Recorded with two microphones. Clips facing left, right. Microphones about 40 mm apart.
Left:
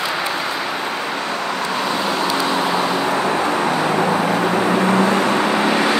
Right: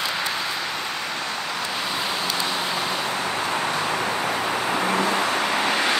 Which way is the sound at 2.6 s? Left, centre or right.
Left.